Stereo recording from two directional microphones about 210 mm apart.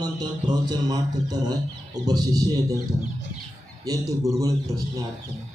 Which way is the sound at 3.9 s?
15° right (ahead or behind).